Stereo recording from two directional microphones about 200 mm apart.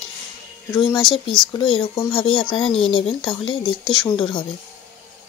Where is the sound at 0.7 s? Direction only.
20° left (ahead or behind).